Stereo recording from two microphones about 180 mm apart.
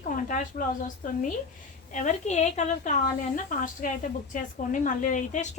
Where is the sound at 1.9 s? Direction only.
45° left (ahead or behind).